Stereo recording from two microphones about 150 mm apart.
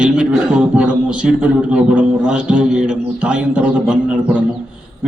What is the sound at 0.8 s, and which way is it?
Speech, 5° right (ahead or behind).